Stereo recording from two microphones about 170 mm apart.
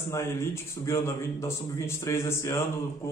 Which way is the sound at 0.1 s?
15° left (ahead or behind).